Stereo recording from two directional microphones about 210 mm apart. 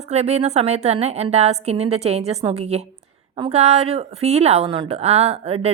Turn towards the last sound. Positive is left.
turn(degrees=-30)  # may be behind; listen again after turning